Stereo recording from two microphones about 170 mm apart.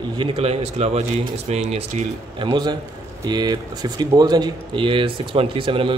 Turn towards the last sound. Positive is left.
turn(degrees=-30)  # may be behind; listen again after turning